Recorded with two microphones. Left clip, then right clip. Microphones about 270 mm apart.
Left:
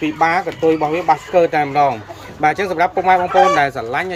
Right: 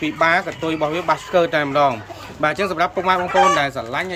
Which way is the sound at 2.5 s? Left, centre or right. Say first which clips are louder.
Left 2 dB; right.